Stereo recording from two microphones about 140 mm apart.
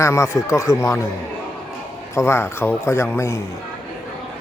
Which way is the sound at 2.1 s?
20° left (ahead or behind).